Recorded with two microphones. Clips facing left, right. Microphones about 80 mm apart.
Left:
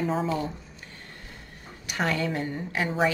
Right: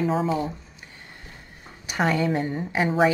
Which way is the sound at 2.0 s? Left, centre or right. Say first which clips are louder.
Right 5 dB; centre.